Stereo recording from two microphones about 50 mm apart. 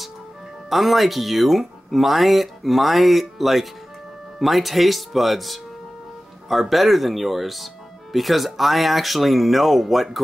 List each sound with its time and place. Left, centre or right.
0.7 s speech: centre